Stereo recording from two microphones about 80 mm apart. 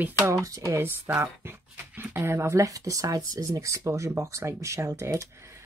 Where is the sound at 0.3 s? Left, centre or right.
Right.